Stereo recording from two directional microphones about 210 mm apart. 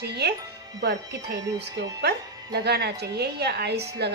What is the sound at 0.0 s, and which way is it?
Speech, 50° right (ahead or behind).